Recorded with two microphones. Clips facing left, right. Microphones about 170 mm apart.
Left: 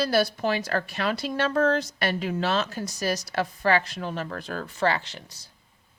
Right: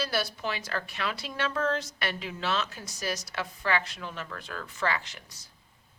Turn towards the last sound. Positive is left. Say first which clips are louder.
# left 3 dB
turn(degrees=30)  # may be behind; listen again after turning